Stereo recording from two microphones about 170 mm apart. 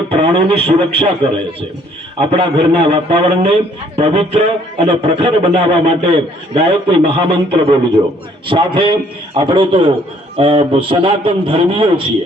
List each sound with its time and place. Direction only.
0.1 s a man's voice: 30° right (ahead or behind)
2.2 s a man's voice: 35° right (ahead or behind)